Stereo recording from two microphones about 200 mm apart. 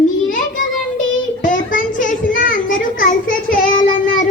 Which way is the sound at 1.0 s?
40° left (ahead or behind).